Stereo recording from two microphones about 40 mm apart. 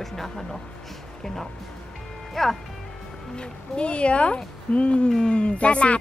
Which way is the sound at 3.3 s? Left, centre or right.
Left.